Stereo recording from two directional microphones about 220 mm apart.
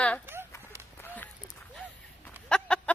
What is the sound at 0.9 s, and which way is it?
Run, 10° left (ahead or behind).